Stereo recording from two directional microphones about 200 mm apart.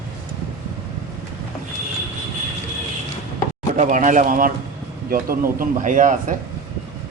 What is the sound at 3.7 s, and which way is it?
Speech, 40° right (ahead or behind).